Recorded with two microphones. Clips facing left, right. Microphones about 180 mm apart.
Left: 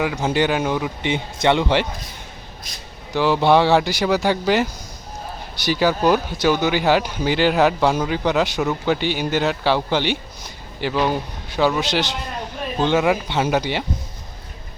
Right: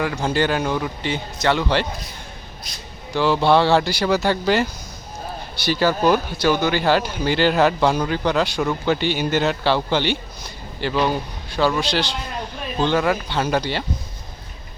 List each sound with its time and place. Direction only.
0.0 s speech: 10° left (ahead or behind)
1.0 s speech: 20° left (ahead or behind)
3.1 s speech: 15° left (ahead or behind)